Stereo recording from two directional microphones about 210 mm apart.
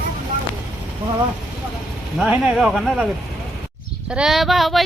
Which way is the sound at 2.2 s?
5° right (ahead or behind).